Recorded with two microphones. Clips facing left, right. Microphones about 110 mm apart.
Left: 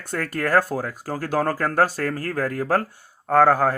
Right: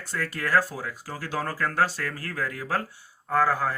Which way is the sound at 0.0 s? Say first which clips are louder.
Left 5 dB; 50° left (ahead or behind).